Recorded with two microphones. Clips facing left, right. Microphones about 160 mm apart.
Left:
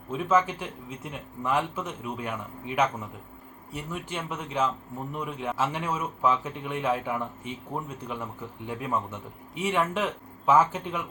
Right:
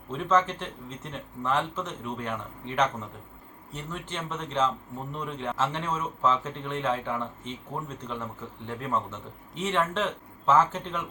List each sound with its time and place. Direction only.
0.1 s a man's voice: 10° left (ahead or behind)